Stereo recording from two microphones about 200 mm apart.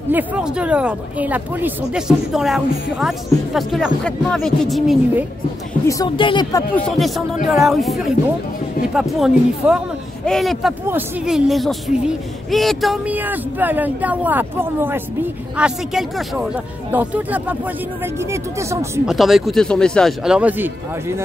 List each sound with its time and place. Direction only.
0.1 s speech: 5° right (ahead or behind)
5.9 s speech: 20° left (ahead or behind)
6.8 s speech: centre (ahead or behind)
19.0 s speech: centre (ahead or behind)